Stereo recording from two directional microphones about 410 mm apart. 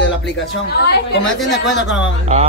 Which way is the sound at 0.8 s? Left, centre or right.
Left.